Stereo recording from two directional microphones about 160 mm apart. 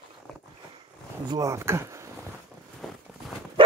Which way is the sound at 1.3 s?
20° right (ahead or behind).